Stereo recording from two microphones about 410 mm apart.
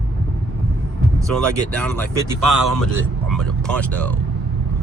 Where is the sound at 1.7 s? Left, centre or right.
Centre.